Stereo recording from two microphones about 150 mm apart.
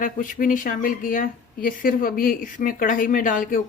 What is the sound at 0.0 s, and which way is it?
Speech, 65° left (ahead or behind).